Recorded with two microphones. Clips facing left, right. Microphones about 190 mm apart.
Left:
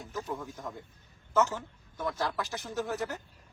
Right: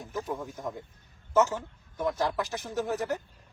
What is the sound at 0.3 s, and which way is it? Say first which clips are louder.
A man's voice: right 3 dB; 15° right (ahead or behind).